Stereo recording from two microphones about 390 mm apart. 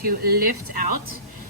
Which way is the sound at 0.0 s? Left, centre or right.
Right.